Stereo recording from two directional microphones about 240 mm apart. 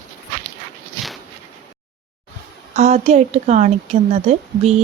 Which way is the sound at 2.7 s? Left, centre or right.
Right.